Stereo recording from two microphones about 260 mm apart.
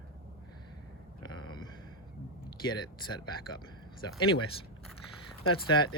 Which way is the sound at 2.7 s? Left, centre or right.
Centre.